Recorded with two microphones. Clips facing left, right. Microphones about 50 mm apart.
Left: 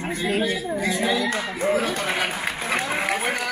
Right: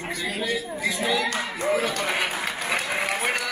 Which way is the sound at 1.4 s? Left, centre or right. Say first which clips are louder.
Left 2 dB; centre.